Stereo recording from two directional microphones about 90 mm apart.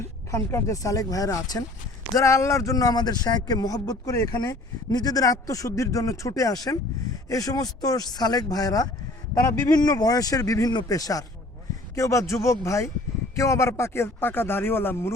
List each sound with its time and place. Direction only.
0.0 s speech: 30° left (ahead or behind)
2.1 s speech: 30° left (ahead or behind)